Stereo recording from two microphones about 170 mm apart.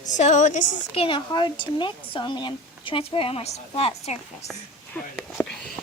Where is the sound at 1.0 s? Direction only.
25° left (ahead or behind).